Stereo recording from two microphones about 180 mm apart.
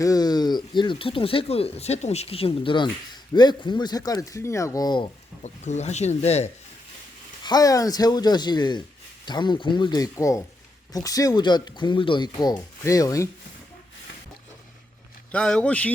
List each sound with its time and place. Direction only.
0.0 s a sound: 20° left (ahead or behind)
0.8 s speech: 30° left (ahead or behind)
5.4 s speech: 40° left (ahead or behind)
7.4 s speech: 20° left (ahead or behind)
15.3 s a man's voice: 5° left (ahead or behind)